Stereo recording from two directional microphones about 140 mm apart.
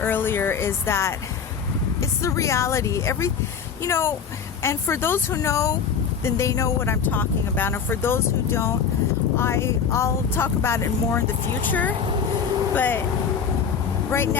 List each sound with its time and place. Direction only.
0.0 s speech: 15° left (ahead or behind)